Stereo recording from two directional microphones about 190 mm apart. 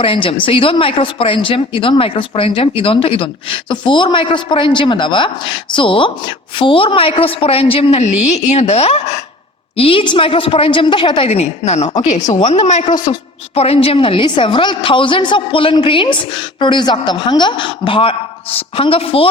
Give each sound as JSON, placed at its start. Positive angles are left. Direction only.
{"t": 0.0, "sound": "a woman's voice", "side_deg": 25}
{"t": 12.3, "sound": "speech", "side_deg": 25}